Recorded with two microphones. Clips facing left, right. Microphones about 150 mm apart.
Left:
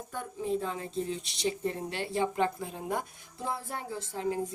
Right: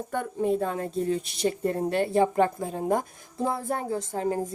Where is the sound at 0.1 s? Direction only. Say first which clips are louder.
Right 6 dB; 60° right (ahead or behind).